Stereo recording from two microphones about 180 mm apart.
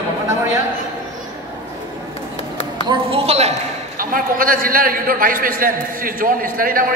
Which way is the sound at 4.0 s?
50° right (ahead or behind).